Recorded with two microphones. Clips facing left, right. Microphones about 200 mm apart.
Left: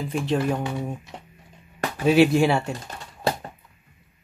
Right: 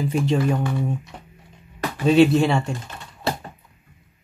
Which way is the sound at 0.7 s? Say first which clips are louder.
Right 4 dB; 15° left (ahead or behind).